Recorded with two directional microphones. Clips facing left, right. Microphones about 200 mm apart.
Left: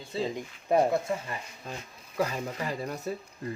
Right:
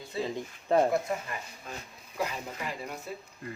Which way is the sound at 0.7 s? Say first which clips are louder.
Left 1 dB; 10° left (ahead or behind).